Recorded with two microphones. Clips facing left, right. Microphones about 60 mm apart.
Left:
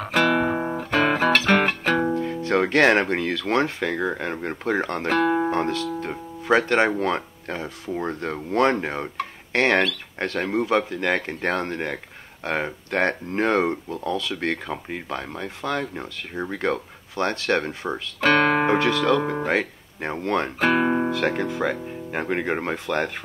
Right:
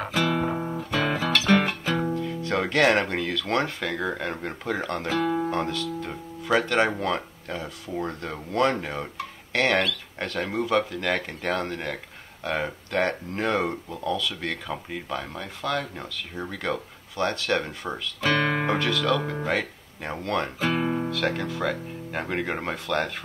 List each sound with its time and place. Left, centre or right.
0.1 s guitar: left
0.6 s guitar: left
0.8 s music: left
2.1 s music: left
2.7 s speech: left
3.2 s speech: centre
5.0 s speech: left
5.5 s speech: left
18.2 s speech: left
18.7 s speech: left
20.5 s speech: left
21.1 s speech: centre